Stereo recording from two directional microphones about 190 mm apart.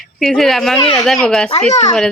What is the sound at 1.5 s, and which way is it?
Speech, 35° left (ahead or behind).